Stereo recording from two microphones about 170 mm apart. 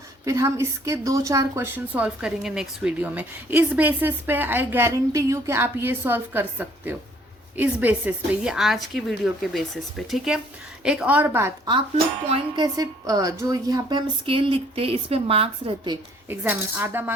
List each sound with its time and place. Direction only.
0.3 s a woman's voice: 20° right (ahead or behind)
12.3 s a woman's voice: 25° right (ahead or behind)
16.3 s a woman's voice: 10° right (ahead or behind)